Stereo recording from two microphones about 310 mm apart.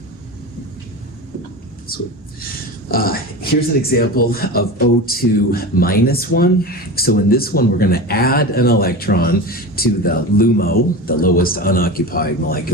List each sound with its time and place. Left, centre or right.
2.9 s a man's voice: left